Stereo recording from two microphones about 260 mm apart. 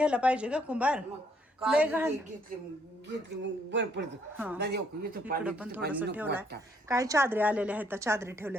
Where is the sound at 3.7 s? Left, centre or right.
Right.